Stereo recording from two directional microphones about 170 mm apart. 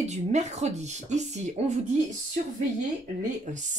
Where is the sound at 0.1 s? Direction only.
45° right (ahead or behind).